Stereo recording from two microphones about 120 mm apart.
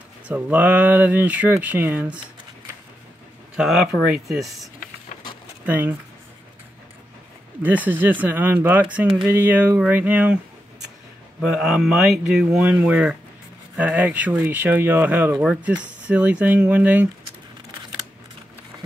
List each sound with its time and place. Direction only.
0.3 s speech: 15° right (ahead or behind)
3.5 s speech: 5° right (ahead or behind)
5.7 s speech: 15° right (ahead or behind)
7.6 s speech: 15° right (ahead or behind)
11.5 s speech: 5° right (ahead or behind)